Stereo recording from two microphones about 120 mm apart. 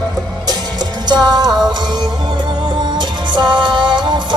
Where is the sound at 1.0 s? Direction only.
35° right (ahead or behind).